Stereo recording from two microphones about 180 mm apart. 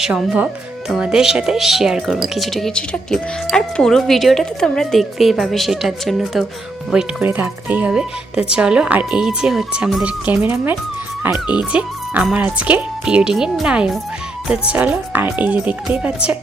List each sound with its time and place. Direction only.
0.0 s speech: 5° right (ahead or behind)